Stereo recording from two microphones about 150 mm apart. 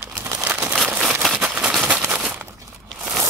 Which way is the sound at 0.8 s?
5° right (ahead or behind).